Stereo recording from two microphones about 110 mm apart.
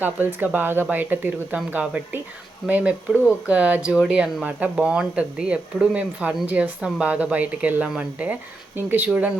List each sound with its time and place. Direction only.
0.0 s speech: 20° right (ahead or behind)